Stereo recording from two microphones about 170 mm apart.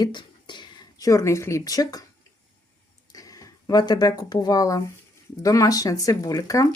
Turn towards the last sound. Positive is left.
turn(degrees=20)  # may be behind; listen again after turning